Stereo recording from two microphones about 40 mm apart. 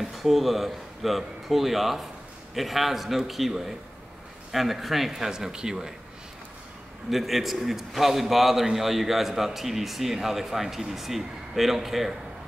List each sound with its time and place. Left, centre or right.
0.0 s a man's voice: centre
5.3 s speech: centre
7.1 s a man's voice: centre